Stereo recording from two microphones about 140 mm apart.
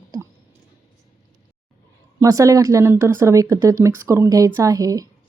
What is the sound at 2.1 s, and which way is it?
Speech, 25° right (ahead or behind).